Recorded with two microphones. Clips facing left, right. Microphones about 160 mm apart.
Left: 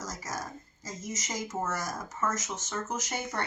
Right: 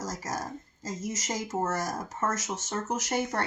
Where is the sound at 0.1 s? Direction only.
40° right (ahead or behind).